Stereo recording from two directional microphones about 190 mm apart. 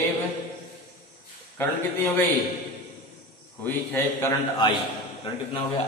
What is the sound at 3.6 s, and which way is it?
A man's voice, 10° left (ahead or behind).